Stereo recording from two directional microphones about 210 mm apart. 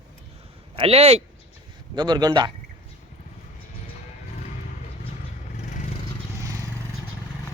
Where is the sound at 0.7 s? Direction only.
30° right (ahead or behind).